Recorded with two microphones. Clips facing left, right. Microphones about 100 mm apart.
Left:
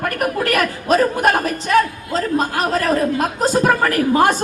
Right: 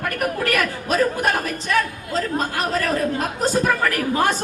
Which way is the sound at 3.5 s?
40° left (ahead or behind).